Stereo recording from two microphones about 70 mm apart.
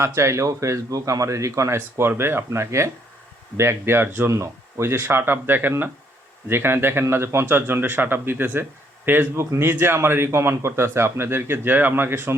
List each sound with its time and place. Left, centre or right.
0.0 s a man's voice: right
4.3 s a man's voice: right